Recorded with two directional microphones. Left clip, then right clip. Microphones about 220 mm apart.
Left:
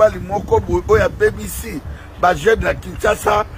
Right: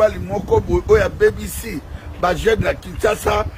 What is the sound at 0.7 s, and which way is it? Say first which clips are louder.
Speech: right 2 dB; centre (ahead or behind).